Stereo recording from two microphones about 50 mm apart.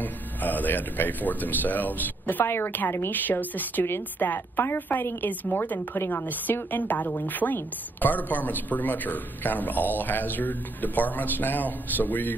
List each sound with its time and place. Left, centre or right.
0.0 s a woman's voice: left
3.8 s a woman's voice: left
4.3 s a woman's voice: left